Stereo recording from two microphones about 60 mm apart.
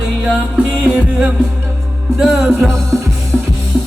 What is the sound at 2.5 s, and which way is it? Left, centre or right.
Music, centre.